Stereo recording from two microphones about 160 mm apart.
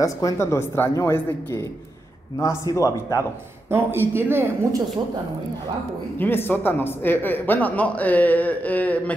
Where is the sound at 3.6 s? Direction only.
15° right (ahead or behind).